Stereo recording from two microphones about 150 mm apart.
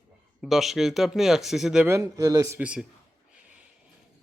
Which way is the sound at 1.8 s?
20° right (ahead or behind).